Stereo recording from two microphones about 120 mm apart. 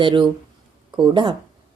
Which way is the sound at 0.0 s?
45° right (ahead or behind).